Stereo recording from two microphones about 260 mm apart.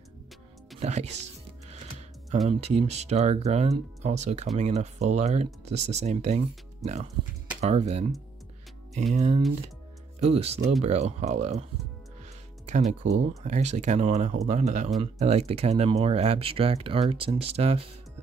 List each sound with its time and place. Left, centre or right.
0.7 s speech: right
9.1 s speech: right
12.6 s speech: right